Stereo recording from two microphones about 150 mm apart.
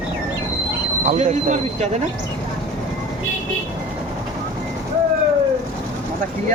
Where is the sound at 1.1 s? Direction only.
55° right (ahead or behind).